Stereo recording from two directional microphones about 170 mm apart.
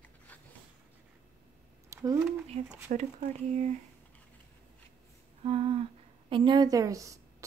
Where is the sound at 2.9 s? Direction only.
45° right (ahead or behind).